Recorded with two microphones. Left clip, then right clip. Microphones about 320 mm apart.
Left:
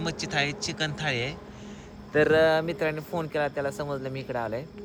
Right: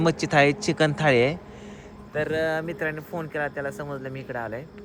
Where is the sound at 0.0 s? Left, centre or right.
Centre.